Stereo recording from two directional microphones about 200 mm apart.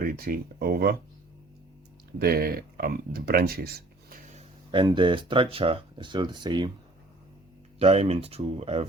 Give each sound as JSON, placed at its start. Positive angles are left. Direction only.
{"t": 0.0, "sound": "speech", "side_deg": -45}
{"t": 2.1, "sound": "speech", "side_deg": -50}
{"t": 4.3, "sound": "speech", "side_deg": -30}
{"t": 7.8, "sound": "speech", "side_deg": -30}